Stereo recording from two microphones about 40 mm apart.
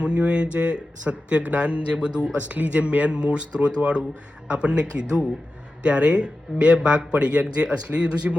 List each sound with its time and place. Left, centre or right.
0.0 s speech: right
2.5 s speech: right
2.8 s speech: right